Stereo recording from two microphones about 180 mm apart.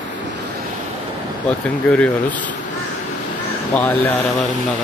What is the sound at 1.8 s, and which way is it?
Speech, 10° left (ahead or behind).